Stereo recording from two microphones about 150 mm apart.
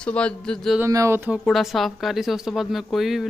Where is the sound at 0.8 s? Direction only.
20° right (ahead or behind).